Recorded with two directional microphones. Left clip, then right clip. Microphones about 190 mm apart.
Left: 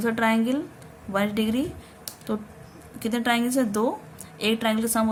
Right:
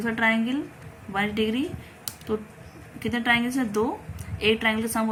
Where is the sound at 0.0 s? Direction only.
55° left (ahead or behind).